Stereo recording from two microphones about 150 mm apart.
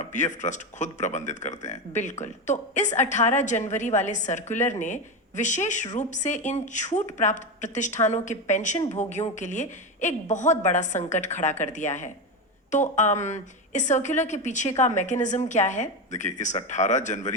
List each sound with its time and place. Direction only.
0.1 s a woman's voice: 55° left (ahead or behind)